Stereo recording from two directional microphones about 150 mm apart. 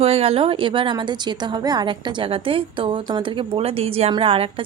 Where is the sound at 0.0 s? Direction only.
40° right (ahead or behind).